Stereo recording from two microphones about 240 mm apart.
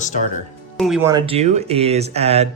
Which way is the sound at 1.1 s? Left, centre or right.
Right.